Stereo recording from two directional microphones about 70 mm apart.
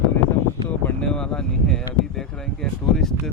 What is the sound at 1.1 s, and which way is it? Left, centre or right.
Speech, centre.